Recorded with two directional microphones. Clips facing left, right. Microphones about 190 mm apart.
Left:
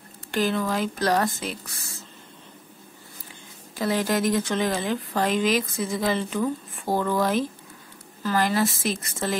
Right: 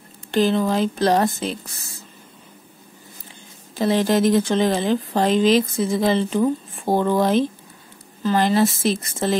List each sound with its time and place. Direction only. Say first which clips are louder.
0.3 s speech: right 6 dB; 25° right (ahead or behind)
3.7 s speech: right 6 dB; 25° right (ahead or behind)